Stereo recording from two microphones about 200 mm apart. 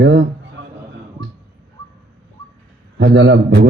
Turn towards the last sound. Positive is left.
turn(degrees=-60)  # may be behind; listen again after turning